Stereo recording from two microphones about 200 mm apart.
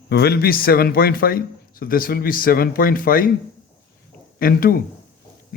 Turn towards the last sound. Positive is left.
turn(degrees=45)  # may be behind; listen again after turning